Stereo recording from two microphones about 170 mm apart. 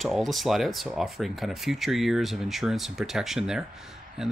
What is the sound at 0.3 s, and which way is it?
Speech, centre (ahead or behind).